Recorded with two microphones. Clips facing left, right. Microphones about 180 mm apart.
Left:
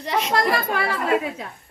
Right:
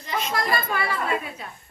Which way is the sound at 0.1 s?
80° left.